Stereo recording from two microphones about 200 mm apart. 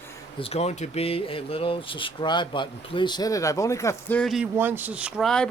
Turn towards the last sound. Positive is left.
turn(degrees=5)  # may be behind; listen again after turning